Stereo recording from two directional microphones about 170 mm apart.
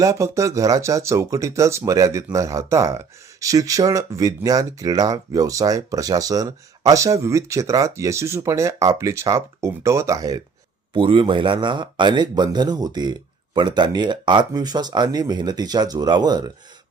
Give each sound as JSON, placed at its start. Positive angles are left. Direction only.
{"t": 0.0, "sound": "speech", "side_deg": -20}